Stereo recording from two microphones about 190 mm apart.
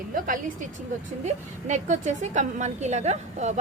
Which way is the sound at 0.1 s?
45° right (ahead or behind).